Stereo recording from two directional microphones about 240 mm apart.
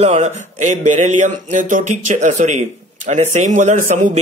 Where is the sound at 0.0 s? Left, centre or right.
Right.